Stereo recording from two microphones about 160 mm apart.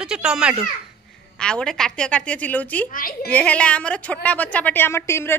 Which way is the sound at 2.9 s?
60° left (ahead or behind).